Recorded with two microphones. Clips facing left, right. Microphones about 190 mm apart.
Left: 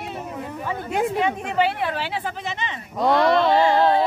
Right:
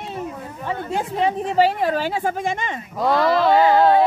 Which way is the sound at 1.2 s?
35° right (ahead or behind).